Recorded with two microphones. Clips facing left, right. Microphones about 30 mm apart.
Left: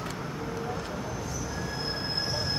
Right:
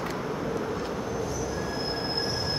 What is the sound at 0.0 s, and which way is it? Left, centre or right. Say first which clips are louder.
Vehicle: right 4 dB; centre.